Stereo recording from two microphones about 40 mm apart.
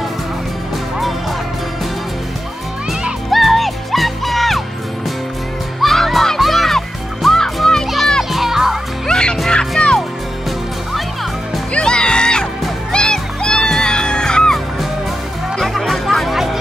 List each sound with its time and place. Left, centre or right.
3.3 s music: centre
5.8 s music: centre
8.2 s children playing: centre
9.0 s music: centre
11.7 s music: left
15.8 s music: centre